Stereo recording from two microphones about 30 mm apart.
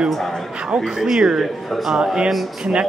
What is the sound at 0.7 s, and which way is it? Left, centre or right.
Speech, centre.